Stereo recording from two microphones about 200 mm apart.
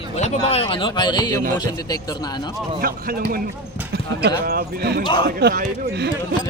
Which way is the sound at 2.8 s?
45° right (ahead or behind).